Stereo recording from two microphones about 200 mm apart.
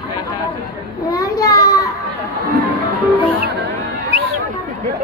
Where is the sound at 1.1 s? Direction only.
15° left (ahead or behind).